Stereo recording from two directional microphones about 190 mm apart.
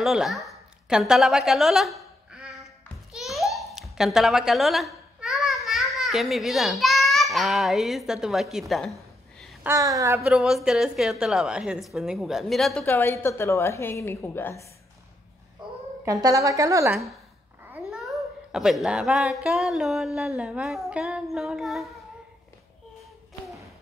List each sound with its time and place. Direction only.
0.0 s a woman's voice: centre (ahead or behind)
2.3 s a sound: 5° right (ahead or behind)
3.5 s babbling: centre (ahead or behind)
9.6 s a woman's voice: 15° right (ahead or behind)
10.3 s a woman's voice: centre (ahead or behind)
12.8 s a woman's voice: 10° left (ahead or behind)
15.6 s a sound: 25° right (ahead or behind)
16.1 s a woman's voice: 20° right (ahead or behind)
17.6 s a sound: 5° right (ahead or behind)
19.4 s a woman's voice: centre (ahead or behind)